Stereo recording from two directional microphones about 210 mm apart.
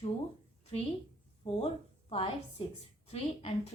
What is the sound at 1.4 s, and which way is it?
A woman's voice, 30° left (ahead or behind).